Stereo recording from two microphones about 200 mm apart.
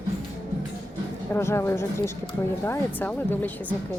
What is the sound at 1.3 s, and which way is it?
Speech, 10° left (ahead or behind).